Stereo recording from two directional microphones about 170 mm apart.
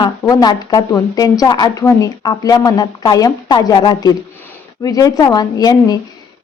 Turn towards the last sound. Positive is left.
turn(degrees=25)  # may be behind; listen again after turning